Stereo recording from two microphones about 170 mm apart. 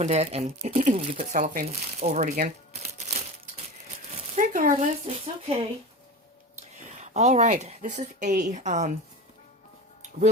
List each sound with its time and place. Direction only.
0.0 s speech: 40° right (ahead or behind)
1.6 s crumpling: 40° right (ahead or behind)
4.4 s a sound: 55° right (ahead or behind)
5.0 s speech: 35° right (ahead or behind)
6.6 s a sound: 45° right (ahead or behind)
7.6 s speech: 45° right (ahead or behind)